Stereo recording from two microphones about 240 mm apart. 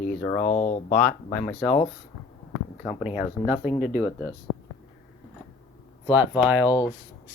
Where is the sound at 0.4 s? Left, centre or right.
Left.